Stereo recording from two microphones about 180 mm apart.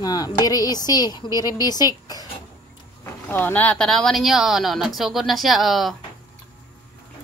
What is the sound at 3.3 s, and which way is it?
Speech, 10° left (ahead or behind).